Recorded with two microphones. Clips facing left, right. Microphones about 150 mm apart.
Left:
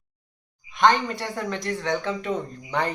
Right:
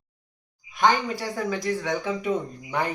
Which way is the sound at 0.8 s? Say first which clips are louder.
Left 2 dB; 5° right (ahead or behind).